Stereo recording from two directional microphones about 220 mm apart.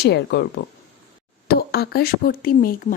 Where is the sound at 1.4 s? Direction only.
45° left (ahead or behind).